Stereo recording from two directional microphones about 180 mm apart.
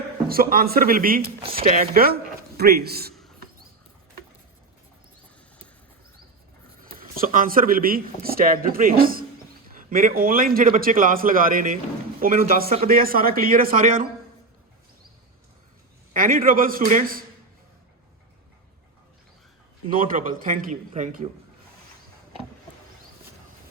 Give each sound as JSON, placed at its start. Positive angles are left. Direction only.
{"t": 0.3, "sound": "a man's voice", "side_deg": -55}
{"t": 1.4, "sound": "speech", "side_deg": -30}
{"t": 1.7, "sound": "a man's voice", "side_deg": -50}
{"t": 6.9, "sound": "speech", "side_deg": -50}
{"t": 16.1, "sound": "speech", "side_deg": -50}
{"t": 19.9, "sound": "speech", "side_deg": -50}